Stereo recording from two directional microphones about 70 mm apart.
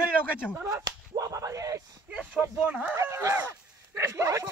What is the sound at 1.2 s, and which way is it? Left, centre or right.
Speech, right.